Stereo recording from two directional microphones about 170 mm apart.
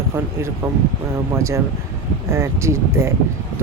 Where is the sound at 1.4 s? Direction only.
15° right (ahead or behind).